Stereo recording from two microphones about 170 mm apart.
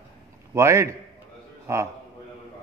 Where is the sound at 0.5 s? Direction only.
15° right (ahead or behind).